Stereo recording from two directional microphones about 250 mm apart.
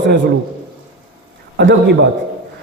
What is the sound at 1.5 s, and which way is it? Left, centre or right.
Speech, right.